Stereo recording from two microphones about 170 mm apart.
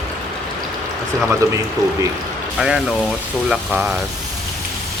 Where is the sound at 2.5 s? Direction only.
Centre (ahead or behind).